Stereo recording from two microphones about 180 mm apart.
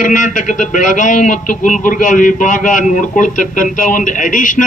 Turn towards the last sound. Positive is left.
turn(degrees=45)  # may be behind; listen again after turning